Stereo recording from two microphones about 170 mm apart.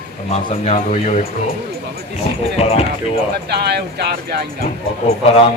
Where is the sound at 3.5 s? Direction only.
75° right (ahead or behind).